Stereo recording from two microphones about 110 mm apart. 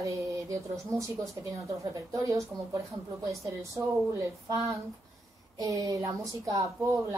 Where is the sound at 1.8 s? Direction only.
30° right (ahead or behind).